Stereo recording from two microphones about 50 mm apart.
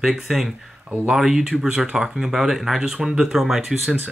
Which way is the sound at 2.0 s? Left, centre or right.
Centre.